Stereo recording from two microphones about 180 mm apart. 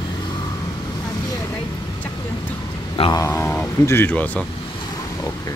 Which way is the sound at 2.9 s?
30° left (ahead or behind).